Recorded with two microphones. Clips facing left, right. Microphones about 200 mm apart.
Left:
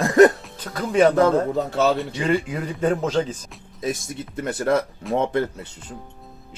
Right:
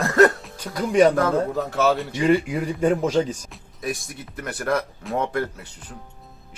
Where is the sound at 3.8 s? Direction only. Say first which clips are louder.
Left 3 dB; 25° left (ahead or behind).